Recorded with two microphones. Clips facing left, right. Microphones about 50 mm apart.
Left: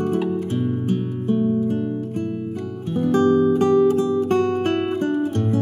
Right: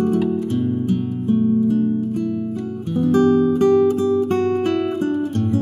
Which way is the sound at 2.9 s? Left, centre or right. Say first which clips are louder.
Right 2 dB; left.